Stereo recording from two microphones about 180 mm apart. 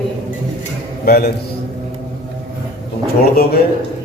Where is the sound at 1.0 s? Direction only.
55° left (ahead or behind).